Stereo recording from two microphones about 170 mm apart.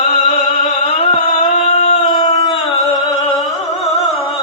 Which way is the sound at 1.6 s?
35° left (ahead or behind).